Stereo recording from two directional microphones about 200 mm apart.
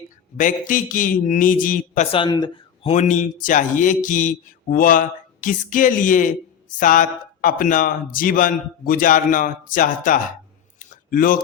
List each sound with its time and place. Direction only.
0.3 s speech: 40° left (ahead or behind)
2.1 s speech: 25° left (ahead or behind)
2.9 s speech: 35° left (ahead or behind)
10.8 s a sound: 45° left (ahead or behind)